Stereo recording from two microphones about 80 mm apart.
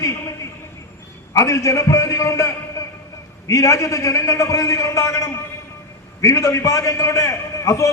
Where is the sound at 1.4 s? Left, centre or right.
Left.